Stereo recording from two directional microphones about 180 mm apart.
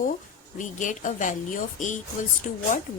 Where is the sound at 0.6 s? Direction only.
45° left (ahead or behind).